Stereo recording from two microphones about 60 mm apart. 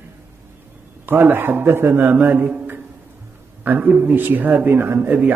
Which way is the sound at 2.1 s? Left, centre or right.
Right.